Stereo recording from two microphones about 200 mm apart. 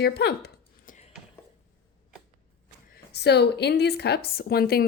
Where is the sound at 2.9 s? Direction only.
55° left (ahead or behind).